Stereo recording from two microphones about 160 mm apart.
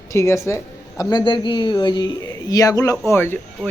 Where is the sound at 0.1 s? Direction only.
20° left (ahead or behind).